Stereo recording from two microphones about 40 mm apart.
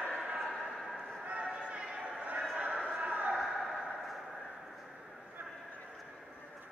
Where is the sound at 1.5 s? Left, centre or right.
Right.